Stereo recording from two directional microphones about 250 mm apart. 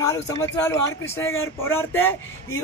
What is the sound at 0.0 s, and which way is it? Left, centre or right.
Speech, centre.